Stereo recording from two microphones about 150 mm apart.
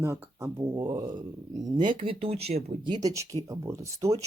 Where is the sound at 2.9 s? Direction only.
25° right (ahead or behind).